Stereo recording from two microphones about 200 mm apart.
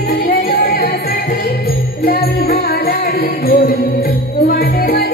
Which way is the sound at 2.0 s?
50° left (ahead or behind).